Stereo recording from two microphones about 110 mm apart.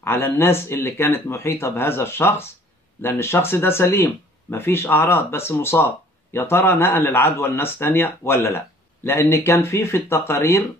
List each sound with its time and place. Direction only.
0.0 s a man's voice: 20° left (ahead or behind)